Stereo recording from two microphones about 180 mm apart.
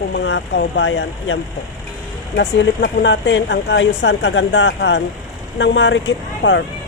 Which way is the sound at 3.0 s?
80° left.